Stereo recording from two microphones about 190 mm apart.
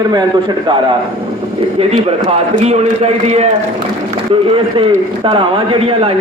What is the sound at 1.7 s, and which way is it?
A man's voice, 30° right (ahead or behind).